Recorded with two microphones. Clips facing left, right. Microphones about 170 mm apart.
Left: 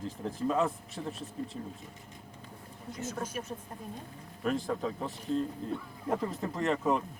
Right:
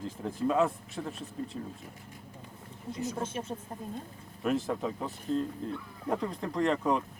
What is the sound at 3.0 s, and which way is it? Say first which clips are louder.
Speech: right 2 dB; 20° right (ahead or behind).